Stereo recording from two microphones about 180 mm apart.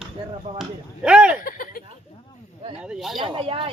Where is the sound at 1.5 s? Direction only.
50° left (ahead or behind).